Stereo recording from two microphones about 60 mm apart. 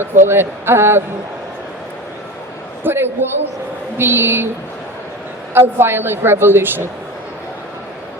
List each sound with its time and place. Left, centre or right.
0.0 s a woman's voice: right
2.8 s a woman's voice: right
5.5 s a woman's voice: right